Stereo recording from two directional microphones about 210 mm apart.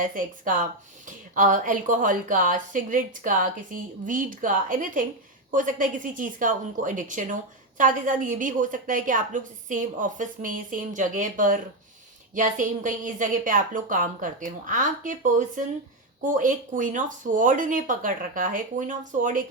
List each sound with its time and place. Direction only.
0.0 s a woman's voice: 40° right (ahead or behind)